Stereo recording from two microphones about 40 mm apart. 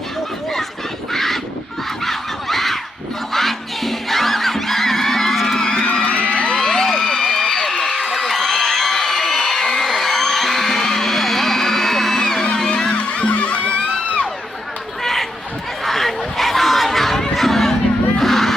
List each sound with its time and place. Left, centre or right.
1.1 s goose: centre
2.0 s honk: centre
3.3 s crowd: centre
5.5 s music: centre
5.8 s crowd: left
6.6 s a sound: centre
6.9 s a sound: left
12.7 s music: centre
13.0 s music: left
15.0 s a sound: centre
17.3 s chatter: centre
18.2 s music: centre